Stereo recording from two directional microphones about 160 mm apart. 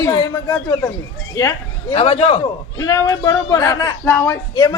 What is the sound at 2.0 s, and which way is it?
Speech, 40° left (ahead or behind).